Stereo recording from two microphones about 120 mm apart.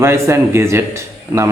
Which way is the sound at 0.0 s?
20° right (ahead or behind).